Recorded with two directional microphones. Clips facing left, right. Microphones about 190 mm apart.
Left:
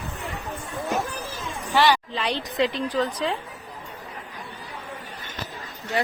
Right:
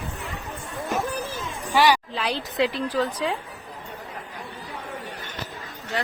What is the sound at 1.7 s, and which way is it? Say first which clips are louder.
A woman's voice: right 1 dB; 10° right (ahead or behind).